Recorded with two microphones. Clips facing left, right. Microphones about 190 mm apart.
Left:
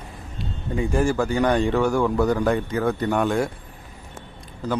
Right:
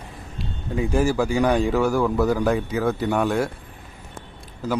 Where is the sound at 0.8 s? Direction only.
Centre (ahead or behind).